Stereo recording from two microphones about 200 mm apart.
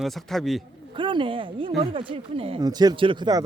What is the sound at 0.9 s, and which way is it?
Speech, 25° right (ahead or behind).